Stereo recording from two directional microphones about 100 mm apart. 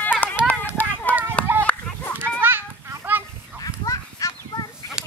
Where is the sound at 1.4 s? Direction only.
15° left (ahead or behind).